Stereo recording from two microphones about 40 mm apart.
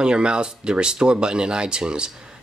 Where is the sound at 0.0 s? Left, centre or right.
Right.